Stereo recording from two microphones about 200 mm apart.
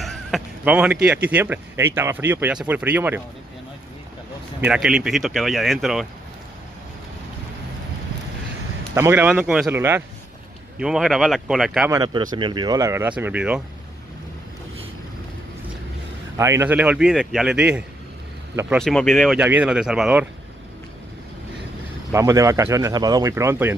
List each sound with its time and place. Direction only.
0.0 s a sound: centre (ahead or behind)
1.0 s speech: 10° right (ahead or behind)
4.6 s speech: 5° right (ahead or behind)
8.9 s speech: 10° right (ahead or behind)
11.9 s speech: 20° right (ahead or behind)
16.3 s speech: 15° right (ahead or behind)
22.1 s speech: 15° right (ahead or behind)